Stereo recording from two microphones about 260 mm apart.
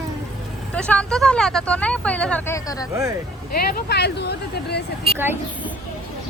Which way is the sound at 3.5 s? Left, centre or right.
Left.